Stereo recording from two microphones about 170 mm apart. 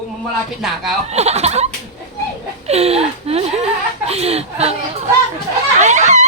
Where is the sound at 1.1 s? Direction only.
40° right (ahead or behind).